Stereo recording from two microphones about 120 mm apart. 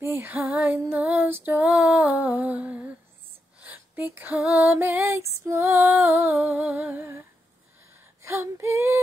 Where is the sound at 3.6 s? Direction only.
15° right (ahead or behind).